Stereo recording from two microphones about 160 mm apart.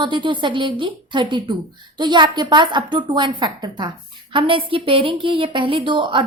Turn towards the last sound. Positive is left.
turn(degrees=-30)  # may be behind; listen again after turning